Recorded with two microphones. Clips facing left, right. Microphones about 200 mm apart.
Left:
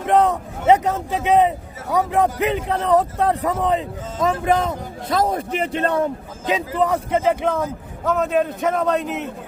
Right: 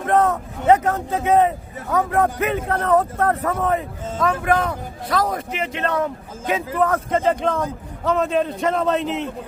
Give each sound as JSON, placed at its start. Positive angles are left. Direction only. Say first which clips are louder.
{"t": 0.0, "sound": "speech", "louder": "left 1 dB", "side_deg": 15}
{"t": 6.5, "sound": "a man's voice", "louder": "even", "side_deg": 15}